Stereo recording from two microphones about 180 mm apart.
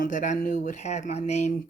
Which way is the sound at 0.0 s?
45° left (ahead or behind).